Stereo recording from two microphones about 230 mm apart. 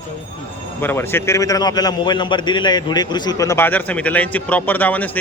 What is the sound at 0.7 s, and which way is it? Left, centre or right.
A man's voice, centre.